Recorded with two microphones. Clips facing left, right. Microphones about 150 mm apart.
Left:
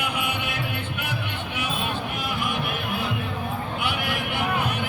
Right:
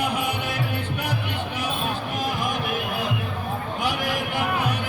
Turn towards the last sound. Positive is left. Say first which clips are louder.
# right 2 dB
turn(degrees=-40)  # may be behind; listen again after turning